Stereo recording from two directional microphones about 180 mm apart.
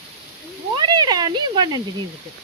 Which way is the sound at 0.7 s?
25° right (ahead or behind).